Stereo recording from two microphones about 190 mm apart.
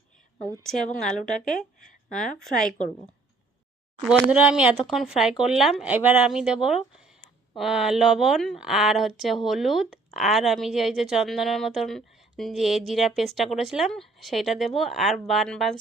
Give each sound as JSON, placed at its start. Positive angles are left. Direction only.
{"t": 0.6, "sound": "a woman's voice", "side_deg": 0}
{"t": 4.0, "sound": "a woman's voice", "side_deg": -5}